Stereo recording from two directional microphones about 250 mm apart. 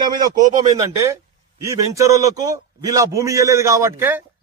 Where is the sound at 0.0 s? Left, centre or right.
Centre.